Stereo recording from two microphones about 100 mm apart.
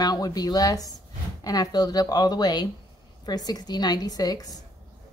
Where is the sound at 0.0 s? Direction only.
40° left (ahead or behind).